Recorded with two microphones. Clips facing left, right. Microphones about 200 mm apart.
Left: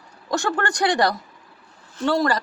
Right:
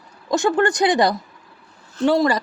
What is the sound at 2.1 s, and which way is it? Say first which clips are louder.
Speech: right 4 dB; 20° right (ahead or behind).